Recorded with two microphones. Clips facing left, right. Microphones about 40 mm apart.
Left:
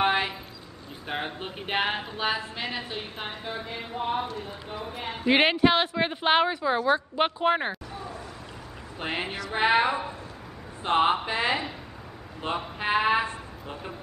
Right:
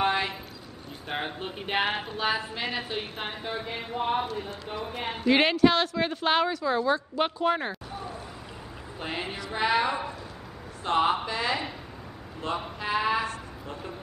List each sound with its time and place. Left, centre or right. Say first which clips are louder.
0.0 s clip-clop: left 2 dB; centre
1.1 s a woman's voice: even; centre
4.3 s a woman's voice: right 2 dB; centre
5.2 s speech: even; left
9.0 s a man's voice: left 3 dB; left
12.7 s speech: left 4 dB; left